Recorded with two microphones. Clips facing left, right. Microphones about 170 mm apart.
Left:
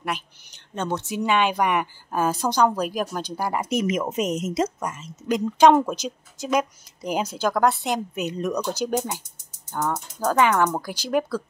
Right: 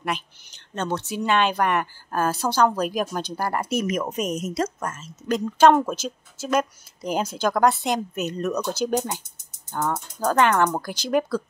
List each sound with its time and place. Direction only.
0.7 s speech: 10° left (ahead or behind)